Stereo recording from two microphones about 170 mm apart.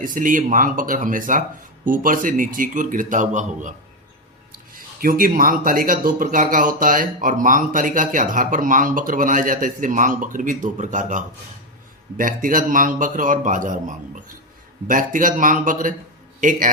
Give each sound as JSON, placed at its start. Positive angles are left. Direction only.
{"t": 0.0, "sound": "speech", "side_deg": -50}
{"t": 4.5, "sound": "speech", "side_deg": -55}